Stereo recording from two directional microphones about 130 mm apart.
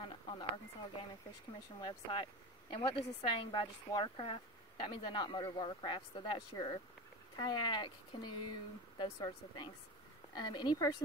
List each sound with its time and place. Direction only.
0.0 s speech: 40° left (ahead or behind)